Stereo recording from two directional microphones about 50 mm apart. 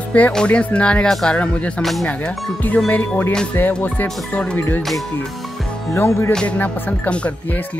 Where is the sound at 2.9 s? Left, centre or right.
Left.